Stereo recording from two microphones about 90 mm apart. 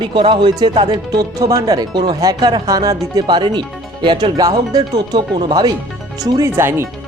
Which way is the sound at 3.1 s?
55° right (ahead or behind).